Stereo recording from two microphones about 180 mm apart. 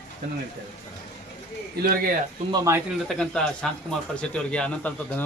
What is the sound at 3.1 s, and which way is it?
Speech, 5° left (ahead or behind).